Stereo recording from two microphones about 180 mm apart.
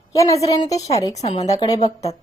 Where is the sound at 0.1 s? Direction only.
15° left (ahead or behind).